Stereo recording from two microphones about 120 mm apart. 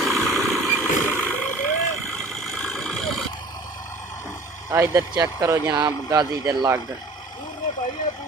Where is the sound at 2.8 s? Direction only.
Centre (ahead or behind).